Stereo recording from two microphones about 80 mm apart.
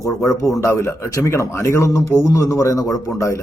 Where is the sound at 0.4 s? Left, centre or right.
Left.